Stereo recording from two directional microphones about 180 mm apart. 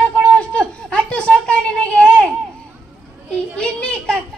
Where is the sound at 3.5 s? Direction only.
5° left (ahead or behind).